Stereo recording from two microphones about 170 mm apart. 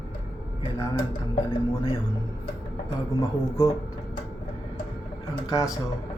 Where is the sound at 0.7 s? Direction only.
15° left (ahead or behind).